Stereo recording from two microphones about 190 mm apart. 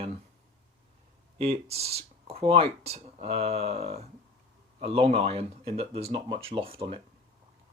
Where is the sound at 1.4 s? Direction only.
30° right (ahead or behind).